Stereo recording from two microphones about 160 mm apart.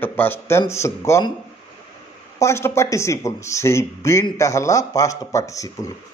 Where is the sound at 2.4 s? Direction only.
15° left (ahead or behind).